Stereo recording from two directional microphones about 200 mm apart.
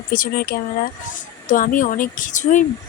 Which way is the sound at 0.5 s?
45° left (ahead or behind).